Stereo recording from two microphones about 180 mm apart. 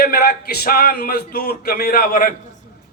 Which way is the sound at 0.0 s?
60° left (ahead or behind).